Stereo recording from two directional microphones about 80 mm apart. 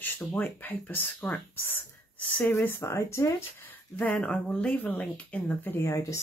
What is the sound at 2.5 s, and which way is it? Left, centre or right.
Speech, left.